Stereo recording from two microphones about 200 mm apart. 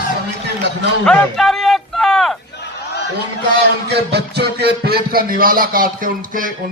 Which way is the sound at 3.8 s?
55° right (ahead or behind).